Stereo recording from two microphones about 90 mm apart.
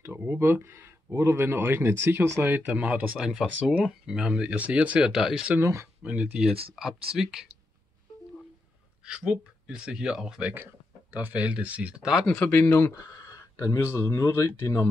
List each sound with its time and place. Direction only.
0.0 s speech: 25° right (ahead or behind)
3.2 s speech: 5° right (ahead or behind)
5.6 s speech: 30° right (ahead or behind)
6.0 s speech: 15° right (ahead or behind)
9.0 s speech: 10° right (ahead or behind)
12.4 s speech: 25° left (ahead or behind)